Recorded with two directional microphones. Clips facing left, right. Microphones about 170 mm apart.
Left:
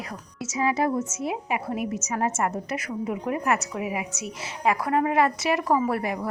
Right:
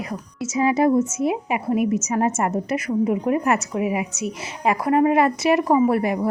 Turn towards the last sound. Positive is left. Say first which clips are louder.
# right 7 dB
turn(degrees=-25)  # may be behind; listen again after turning